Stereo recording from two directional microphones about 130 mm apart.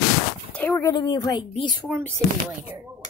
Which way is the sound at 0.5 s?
15° left (ahead or behind).